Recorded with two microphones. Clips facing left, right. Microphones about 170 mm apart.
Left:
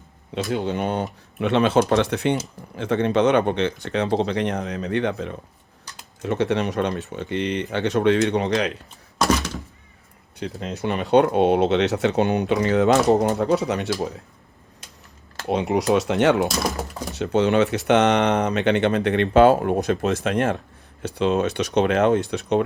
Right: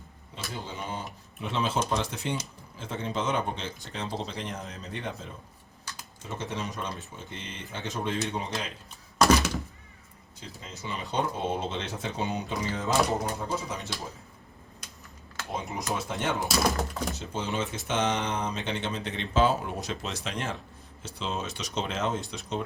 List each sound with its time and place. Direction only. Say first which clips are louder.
0.3 s speech: left 14 dB; 70° left (ahead or behind)
10.4 s speech: left 14 dB; 70° left (ahead or behind)
15.4 s speech: left 13 dB; 75° left (ahead or behind)